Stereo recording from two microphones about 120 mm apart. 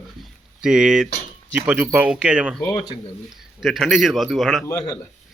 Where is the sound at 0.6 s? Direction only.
5° right (ahead or behind).